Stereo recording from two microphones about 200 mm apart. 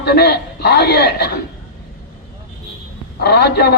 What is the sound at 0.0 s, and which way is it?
A man's voice, 55° left (ahead or behind).